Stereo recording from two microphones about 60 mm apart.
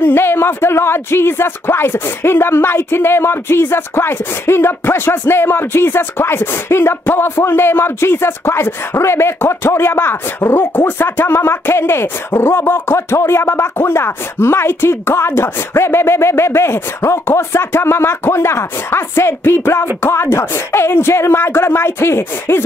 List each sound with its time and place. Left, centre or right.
0.0 s speech: left